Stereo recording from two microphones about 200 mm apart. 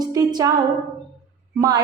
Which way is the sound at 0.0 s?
20° right (ahead or behind).